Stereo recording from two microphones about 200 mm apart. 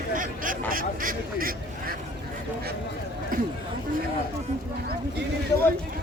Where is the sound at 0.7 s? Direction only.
45° right (ahead or behind).